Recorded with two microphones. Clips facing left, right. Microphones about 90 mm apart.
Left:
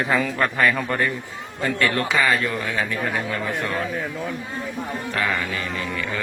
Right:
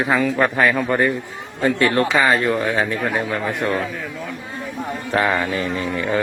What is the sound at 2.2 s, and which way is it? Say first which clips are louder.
Speech: right 4 dB; 35° right (ahead or behind).